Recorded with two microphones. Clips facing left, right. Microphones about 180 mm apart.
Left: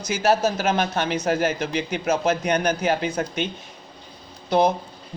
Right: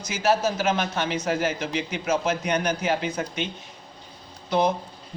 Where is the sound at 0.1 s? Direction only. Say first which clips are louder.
Left 3 dB; 45° left (ahead or behind).